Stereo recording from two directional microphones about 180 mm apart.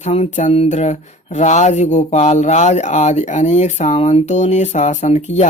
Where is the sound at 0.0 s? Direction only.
35° left (ahead or behind).